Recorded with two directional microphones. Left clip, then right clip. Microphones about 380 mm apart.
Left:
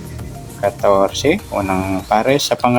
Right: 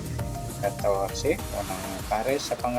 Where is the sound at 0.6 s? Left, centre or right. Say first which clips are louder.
Left 12 dB; centre.